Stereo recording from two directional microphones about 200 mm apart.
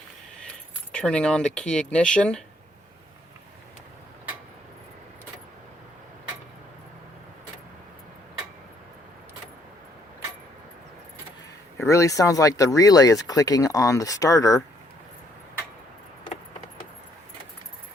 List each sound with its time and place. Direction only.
0.9 s speech: 5° left (ahead or behind)
11.8 s speech: 15° left (ahead or behind)